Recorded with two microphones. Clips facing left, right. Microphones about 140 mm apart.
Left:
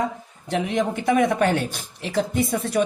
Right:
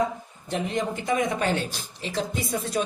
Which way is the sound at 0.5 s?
70° left (ahead or behind).